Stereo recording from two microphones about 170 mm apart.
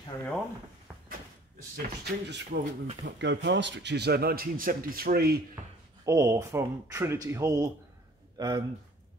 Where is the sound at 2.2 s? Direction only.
90° right; by 5.4 s 65° right (ahead or behind).